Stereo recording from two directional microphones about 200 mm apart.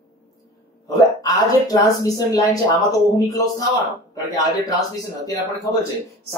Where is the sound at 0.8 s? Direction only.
20° left (ahead or behind).